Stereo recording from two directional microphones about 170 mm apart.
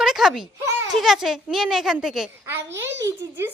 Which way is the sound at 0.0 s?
Centre (ahead or behind).